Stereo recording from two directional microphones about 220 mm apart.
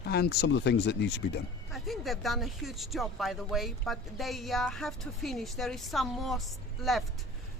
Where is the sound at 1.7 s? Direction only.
Centre (ahead or behind).